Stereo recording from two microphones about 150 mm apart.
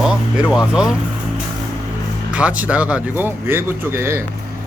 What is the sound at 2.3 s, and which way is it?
Speech, 10° right (ahead or behind).